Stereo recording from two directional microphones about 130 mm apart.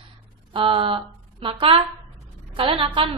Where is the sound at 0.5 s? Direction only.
40° right (ahead or behind).